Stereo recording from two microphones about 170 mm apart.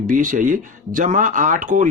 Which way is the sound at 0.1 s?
50° right (ahead or behind).